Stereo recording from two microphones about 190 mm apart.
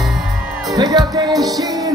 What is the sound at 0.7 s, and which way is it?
Music, 20° right (ahead or behind).